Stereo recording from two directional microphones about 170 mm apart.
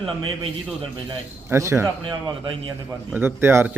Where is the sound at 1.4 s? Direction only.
15° right (ahead or behind).